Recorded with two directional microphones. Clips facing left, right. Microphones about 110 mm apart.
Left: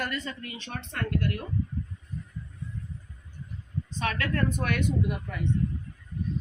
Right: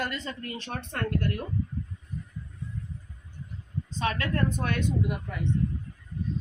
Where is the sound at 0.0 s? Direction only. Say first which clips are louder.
Even; 25° right (ahead or behind).